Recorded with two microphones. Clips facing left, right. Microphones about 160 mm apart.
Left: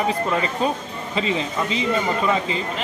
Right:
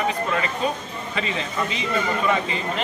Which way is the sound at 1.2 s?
25° left (ahead or behind).